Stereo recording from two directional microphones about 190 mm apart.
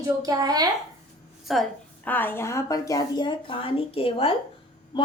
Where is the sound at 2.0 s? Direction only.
10° left (ahead or behind).